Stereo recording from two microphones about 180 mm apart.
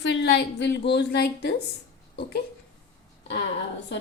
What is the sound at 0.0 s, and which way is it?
A woman's voice, 75° left (ahead or behind).